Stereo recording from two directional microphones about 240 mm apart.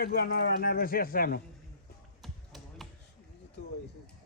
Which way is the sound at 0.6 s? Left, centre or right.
Left.